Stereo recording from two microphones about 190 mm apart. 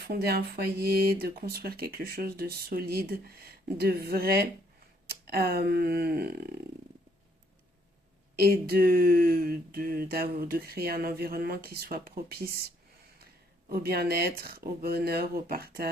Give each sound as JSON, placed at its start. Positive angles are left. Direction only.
{"t": 0.0, "sound": "speech", "side_deg": -55}
{"t": 8.4, "sound": "speech", "side_deg": -55}
{"t": 13.7, "sound": "speech", "side_deg": -55}